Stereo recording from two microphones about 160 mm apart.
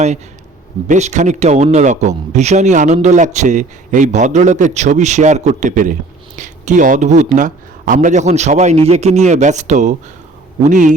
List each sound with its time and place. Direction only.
0.9 s a man's voice: 45° right (ahead or behind)